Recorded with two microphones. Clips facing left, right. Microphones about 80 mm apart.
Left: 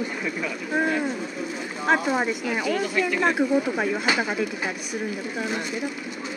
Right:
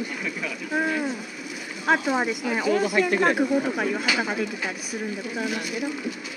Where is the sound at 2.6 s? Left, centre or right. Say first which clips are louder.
Right 4 dB; right.